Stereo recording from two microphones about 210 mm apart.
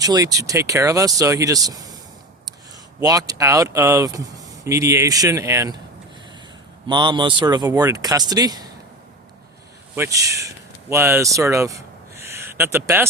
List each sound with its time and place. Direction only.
0.0 s speech: 15° right (ahead or behind)
3.0 s speech: 15° right (ahead or behind)
6.8 s speech: 20° right (ahead or behind)
9.9 s speech: 15° right (ahead or behind)